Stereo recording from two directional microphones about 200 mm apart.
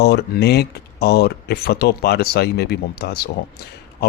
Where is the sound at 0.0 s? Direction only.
55° left (ahead or behind).